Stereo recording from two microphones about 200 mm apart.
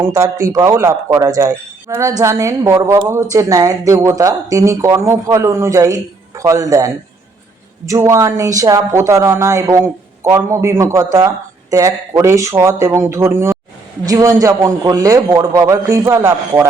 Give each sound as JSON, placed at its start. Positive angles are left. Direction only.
{"t": 0.0, "sound": "a man's voice", "side_deg": -15}